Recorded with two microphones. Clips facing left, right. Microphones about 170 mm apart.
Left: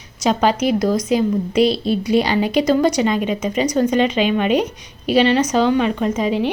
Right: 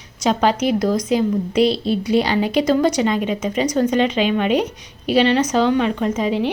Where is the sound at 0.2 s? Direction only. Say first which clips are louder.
Left 1 dB; 10° left (ahead or behind).